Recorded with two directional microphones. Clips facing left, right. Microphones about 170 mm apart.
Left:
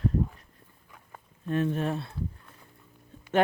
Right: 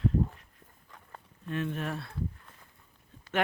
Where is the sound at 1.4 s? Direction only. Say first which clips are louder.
Left 6 dB; 40° left (ahead or behind).